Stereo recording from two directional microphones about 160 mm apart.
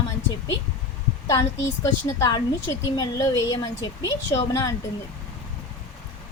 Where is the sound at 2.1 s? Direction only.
25° left (ahead or behind).